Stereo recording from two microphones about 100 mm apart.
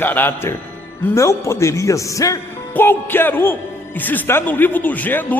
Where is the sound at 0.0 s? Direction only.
20° left (ahead or behind).